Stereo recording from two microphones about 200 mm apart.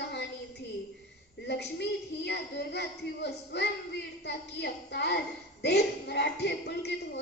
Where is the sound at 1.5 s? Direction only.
55° left (ahead or behind).